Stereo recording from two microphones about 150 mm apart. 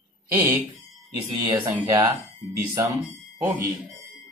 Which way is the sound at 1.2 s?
15° right (ahead or behind).